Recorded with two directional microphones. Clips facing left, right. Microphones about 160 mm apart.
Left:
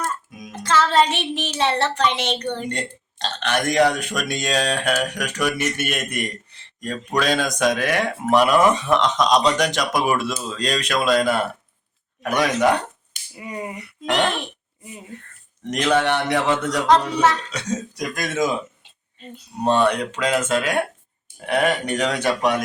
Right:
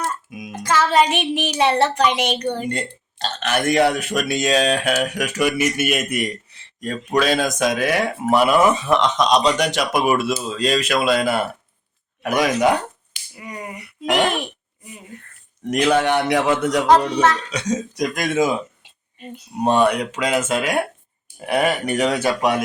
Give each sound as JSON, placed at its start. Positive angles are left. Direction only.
{"t": 0.3, "sound": "child singing", "side_deg": -10}
{"t": 6.7, "sound": "speech", "side_deg": -5}
{"t": 12.2, "sound": "child singing", "side_deg": -10}
{"t": 13.3, "sound": "speech", "side_deg": 25}
{"t": 14.0, "sound": "child singing", "side_deg": -10}
{"t": 15.6, "sound": "child singing", "side_deg": -10}